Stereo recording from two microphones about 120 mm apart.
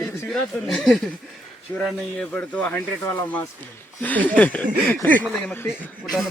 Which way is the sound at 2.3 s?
15° left (ahead or behind).